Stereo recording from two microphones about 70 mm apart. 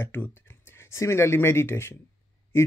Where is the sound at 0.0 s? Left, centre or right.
Left.